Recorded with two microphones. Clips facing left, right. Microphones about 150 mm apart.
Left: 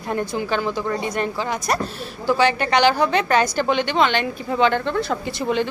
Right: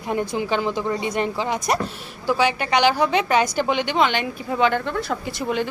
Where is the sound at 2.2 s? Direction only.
10° right (ahead or behind).